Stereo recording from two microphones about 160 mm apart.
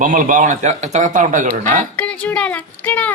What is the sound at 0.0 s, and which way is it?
A man's voice, 55° right (ahead or behind).